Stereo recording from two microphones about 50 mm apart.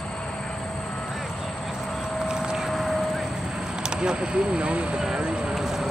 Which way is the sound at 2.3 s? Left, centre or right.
Centre.